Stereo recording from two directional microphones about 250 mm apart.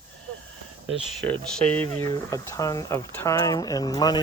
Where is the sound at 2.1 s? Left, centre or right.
Centre.